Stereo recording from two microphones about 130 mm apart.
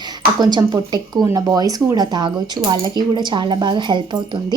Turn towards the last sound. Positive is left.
turn(degrees=-35)  # may be behind; listen again after turning